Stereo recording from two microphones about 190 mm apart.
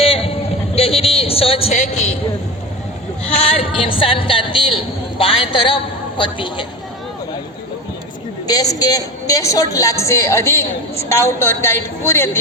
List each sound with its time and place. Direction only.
0.0 s a sound: 30° left (ahead or behind)
3.5 s a man's voice: 30° left (ahead or behind)
8.4 s a woman's voice: 20° left (ahead or behind)